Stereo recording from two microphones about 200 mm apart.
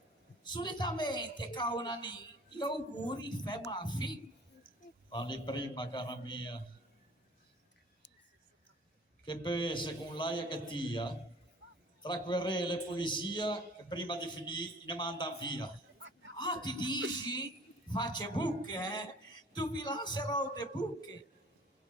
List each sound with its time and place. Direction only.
0.4 s a woman's voice: 20° left (ahead or behind)
9.2 s a woman's voice: 25° left (ahead or behind)